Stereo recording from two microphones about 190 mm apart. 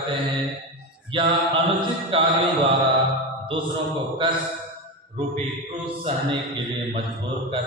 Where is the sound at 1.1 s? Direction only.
25° right (ahead or behind).